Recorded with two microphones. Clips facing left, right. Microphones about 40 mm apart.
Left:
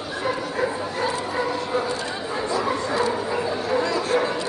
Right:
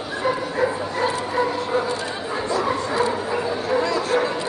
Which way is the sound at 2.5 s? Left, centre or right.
Centre.